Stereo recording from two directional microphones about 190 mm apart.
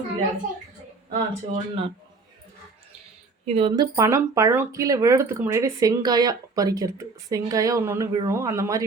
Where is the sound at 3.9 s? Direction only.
15° right (ahead or behind).